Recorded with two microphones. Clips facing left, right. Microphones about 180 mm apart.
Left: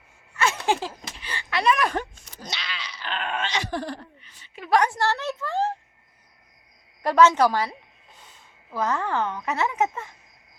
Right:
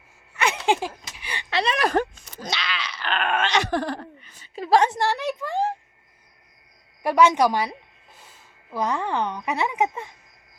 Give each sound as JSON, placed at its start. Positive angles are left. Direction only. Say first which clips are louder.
{"t": 0.3, "sound": "a sound", "louder": "right 1 dB", "side_deg": -20}
{"t": 1.5, "sound": "speech", "louder": "left 1 dB", "side_deg": -30}
{"t": 2.1, "sound": "groan", "louder": "right 6 dB", "side_deg": -90}
{"t": 4.2, "sound": "a woman's voice", "louder": "right 7 dB", "side_deg": -45}
{"t": 7.0, "sound": "a woman's voice", "louder": "even", "side_deg": -15}